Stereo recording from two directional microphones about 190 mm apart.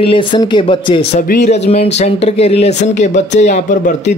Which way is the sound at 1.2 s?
40° left (ahead or behind).